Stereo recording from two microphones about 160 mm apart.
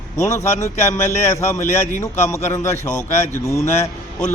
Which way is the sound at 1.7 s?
50° left (ahead or behind).